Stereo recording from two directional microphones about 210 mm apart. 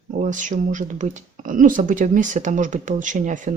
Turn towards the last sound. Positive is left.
turn(degrees=-35)  # may be behind; listen again after turning